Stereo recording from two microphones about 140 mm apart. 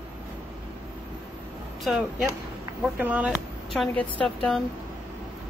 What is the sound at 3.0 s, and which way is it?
Speech, 10° right (ahead or behind).